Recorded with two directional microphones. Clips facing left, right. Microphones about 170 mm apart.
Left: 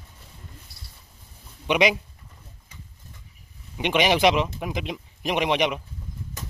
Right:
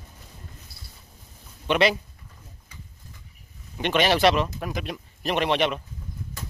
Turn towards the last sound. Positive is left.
turn(degrees=15)  # may be behind; listen again after turning